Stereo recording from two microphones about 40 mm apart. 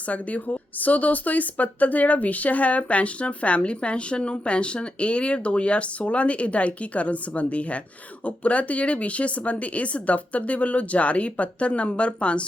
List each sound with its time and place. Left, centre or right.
0.1 s speech: left